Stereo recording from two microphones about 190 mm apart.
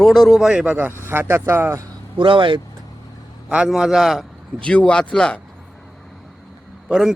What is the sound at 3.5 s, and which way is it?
Speech, 5° right (ahead or behind).